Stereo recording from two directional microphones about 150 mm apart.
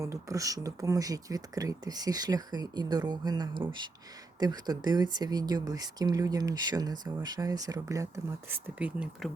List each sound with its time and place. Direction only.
0.0 s speech: 20° right (ahead or behind)